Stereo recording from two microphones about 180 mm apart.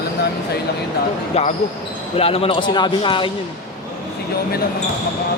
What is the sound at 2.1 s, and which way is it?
Speech, 30° left (ahead or behind).